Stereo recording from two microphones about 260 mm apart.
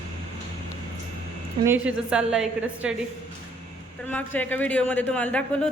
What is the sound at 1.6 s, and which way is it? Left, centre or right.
A man's voice, centre.